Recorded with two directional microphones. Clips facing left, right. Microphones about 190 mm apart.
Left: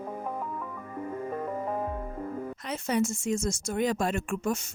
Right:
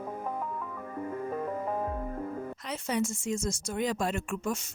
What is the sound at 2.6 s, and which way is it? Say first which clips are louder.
A woman's voice: left 3 dB; 50° left (ahead or behind).